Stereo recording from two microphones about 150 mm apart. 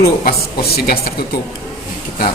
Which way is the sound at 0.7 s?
90° left.